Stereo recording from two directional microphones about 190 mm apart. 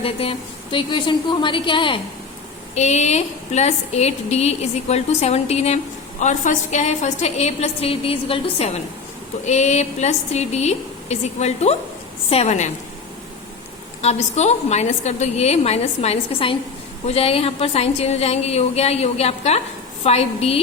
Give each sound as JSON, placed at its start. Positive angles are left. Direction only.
{"t": 0.0, "sound": "a woman's voice", "side_deg": 30}
{"t": 2.7, "sound": "a woman's voice", "side_deg": 35}
{"t": 14.0, "sound": "a woman's voice", "side_deg": 35}